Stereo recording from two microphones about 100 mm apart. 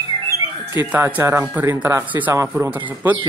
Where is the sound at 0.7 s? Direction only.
15° right (ahead or behind).